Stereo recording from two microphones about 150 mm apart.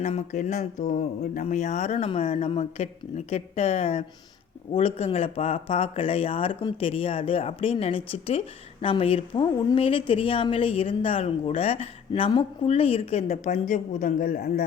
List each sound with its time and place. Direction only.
0.0 s a woman's voice: 50° left (ahead or behind); by 14.6 s 90° left